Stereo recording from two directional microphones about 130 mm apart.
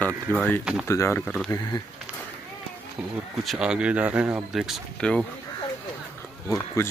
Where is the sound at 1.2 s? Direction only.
5° left (ahead or behind).